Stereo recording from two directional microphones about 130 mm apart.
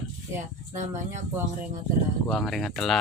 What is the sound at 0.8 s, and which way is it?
Speech, 70° right (ahead or behind).